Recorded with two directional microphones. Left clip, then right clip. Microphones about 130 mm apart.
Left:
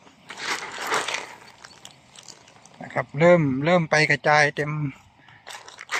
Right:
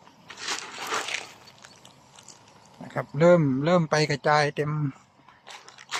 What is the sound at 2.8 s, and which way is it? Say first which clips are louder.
Speech: left 2 dB; 10° right (ahead or behind).